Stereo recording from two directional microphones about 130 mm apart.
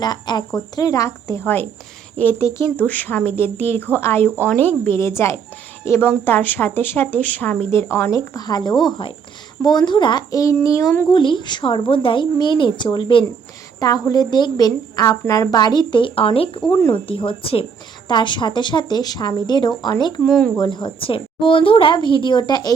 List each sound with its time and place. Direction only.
0.0 s a woman's voice: 35° left (ahead or behind)
11.1 s a woman's voice: 40° left (ahead or behind)
13.7 s a woman's voice: 30° left (ahead or behind); by 16.5 s 45° left (ahead or behind)
16.7 s a woman's voice: 20° left (ahead or behind)
17.1 s a woman's voice: 45° left (ahead or behind)
20.2 s speech: 5° left (ahead or behind)
20.6 s a woman's voice: 35° left (ahead or behind)